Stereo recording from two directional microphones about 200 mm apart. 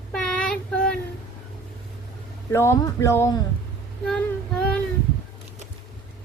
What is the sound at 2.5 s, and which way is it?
Speech, 15° left (ahead or behind).